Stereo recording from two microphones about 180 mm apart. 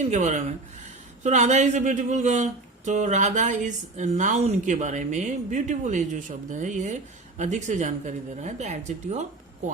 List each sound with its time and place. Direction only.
0.0 s speech: 40° right (ahead or behind)